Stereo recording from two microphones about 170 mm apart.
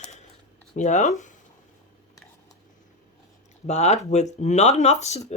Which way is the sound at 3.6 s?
40° left (ahead or behind).